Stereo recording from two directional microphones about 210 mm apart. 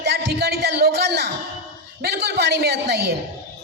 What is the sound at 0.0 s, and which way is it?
Music, 50° right (ahead or behind).